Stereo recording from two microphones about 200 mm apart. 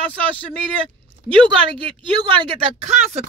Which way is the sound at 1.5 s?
25° right (ahead or behind).